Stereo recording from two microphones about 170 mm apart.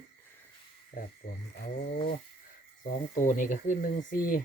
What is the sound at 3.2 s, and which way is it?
Speech, 50° left (ahead or behind).